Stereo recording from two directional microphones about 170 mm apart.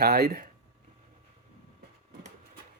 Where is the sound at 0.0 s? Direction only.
65° right (ahead or behind).